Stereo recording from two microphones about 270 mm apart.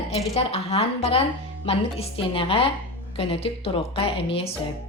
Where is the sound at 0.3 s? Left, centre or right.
Left.